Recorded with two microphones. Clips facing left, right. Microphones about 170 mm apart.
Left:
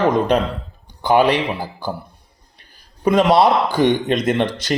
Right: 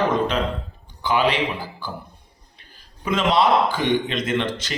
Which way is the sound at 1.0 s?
45° left (ahead or behind).